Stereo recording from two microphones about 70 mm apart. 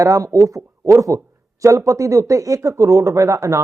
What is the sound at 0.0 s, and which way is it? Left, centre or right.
Speech, right.